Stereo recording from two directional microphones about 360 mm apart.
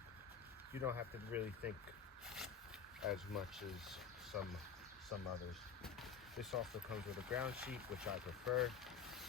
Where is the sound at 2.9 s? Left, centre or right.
Centre.